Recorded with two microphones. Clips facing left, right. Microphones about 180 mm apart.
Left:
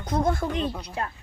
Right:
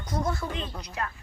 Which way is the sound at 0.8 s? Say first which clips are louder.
Left 2 dB; 30° left (ahead or behind).